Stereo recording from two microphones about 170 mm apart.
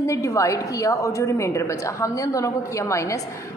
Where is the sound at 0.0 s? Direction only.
15° left (ahead or behind).